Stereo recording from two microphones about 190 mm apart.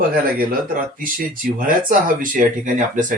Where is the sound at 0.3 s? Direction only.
50° right (ahead or behind).